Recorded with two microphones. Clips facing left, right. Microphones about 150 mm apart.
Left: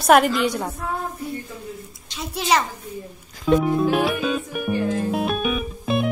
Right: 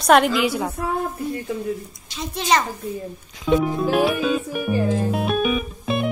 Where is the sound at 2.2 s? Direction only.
5° left (ahead or behind).